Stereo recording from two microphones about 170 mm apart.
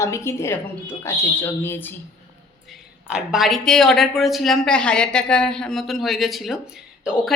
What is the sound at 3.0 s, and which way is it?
A woman's voice, 5° right (ahead or behind).